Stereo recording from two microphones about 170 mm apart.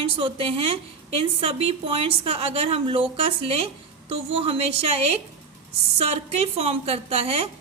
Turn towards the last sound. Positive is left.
turn(degrees=-35)  # may be behind; listen again after turning